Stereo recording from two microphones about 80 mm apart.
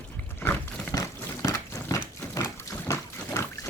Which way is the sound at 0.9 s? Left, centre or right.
Left.